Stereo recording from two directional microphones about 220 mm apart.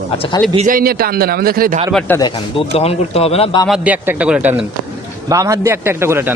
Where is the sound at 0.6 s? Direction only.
40° right (ahead or behind).